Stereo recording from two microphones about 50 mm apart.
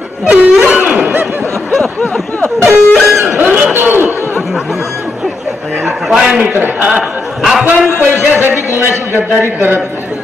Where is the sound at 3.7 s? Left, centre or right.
Right.